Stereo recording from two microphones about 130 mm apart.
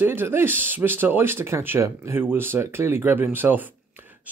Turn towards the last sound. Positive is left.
turn(degrees=-15)  # may be behind; listen again after turning